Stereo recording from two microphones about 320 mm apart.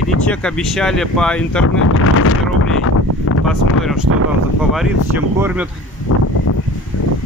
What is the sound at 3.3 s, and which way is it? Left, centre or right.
Wind, left.